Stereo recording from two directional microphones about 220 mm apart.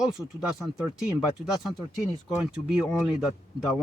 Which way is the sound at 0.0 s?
5° right (ahead or behind).